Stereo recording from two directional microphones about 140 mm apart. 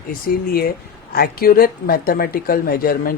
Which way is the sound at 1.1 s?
90° left.